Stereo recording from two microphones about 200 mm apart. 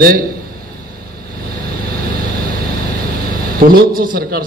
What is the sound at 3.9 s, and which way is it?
Speech, 45° right (ahead or behind).